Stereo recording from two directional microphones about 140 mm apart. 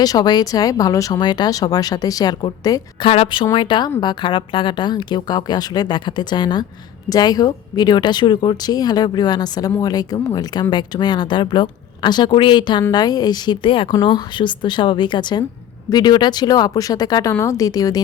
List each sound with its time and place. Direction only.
0.0 s speech: 30° left (ahead or behind)
3.1 s a woman's voice: 45° left (ahead or behind); by 18.0 s 25° left (ahead or behind)